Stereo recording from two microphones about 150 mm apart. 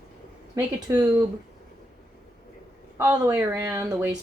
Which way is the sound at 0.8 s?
25° right (ahead or behind).